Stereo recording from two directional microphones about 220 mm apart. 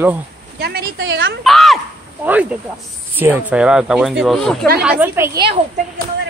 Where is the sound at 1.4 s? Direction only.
Centre (ahead or behind).